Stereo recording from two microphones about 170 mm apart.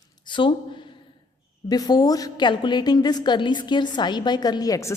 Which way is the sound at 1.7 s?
20° left (ahead or behind).